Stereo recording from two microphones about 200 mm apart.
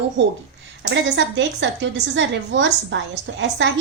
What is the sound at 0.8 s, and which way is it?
A woman's voice, 65° right (ahead or behind).